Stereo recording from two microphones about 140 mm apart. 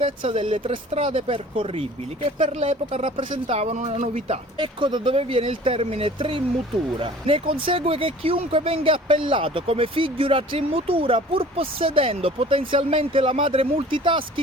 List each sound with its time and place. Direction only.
0.0 s speech: 45° right (ahead or behind)
4.5 s speech: 35° right (ahead or behind)